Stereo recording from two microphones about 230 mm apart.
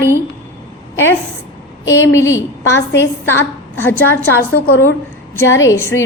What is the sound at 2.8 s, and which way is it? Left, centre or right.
Speech, left.